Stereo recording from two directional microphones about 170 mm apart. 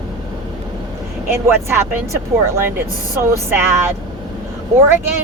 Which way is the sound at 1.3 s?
15° right (ahead or behind).